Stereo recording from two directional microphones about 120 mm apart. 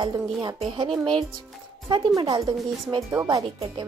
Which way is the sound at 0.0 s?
35° right (ahead or behind).